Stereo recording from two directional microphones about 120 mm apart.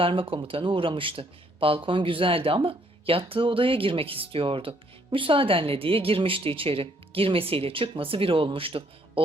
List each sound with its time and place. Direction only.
0.0 s speech: 50° right (ahead or behind)